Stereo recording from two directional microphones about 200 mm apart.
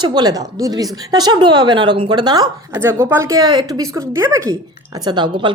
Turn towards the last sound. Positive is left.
turn(degrees=-25)  # may be behind; listen again after turning